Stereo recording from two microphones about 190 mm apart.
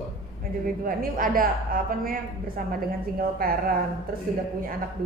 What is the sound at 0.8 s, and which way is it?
A woman's voice, 50° right (ahead or behind).